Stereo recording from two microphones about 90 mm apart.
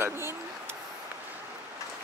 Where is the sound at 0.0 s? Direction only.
25° right (ahead or behind).